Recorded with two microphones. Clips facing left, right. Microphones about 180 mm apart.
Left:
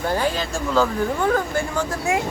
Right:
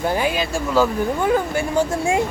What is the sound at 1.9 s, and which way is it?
Speech, 30° right (ahead or behind).